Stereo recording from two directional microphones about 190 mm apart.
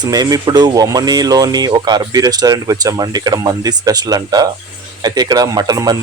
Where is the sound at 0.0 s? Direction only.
20° right (ahead or behind).